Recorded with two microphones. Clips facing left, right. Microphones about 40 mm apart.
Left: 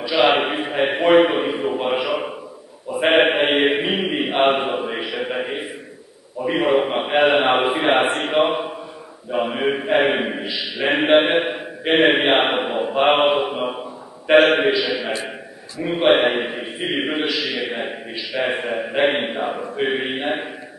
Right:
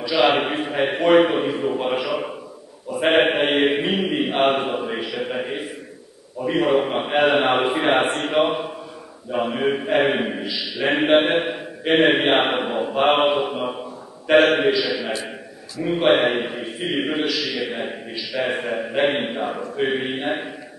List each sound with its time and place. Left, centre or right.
0.0 s a man's voice: centre